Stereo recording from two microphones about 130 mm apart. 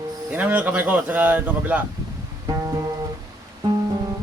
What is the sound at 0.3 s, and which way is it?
Speech, 10° right (ahead or behind).